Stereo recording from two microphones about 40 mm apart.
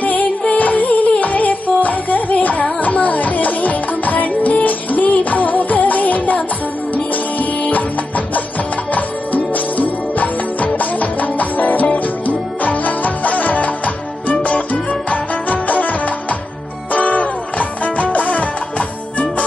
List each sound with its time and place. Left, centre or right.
0.0 s music: left
8.9 s music: left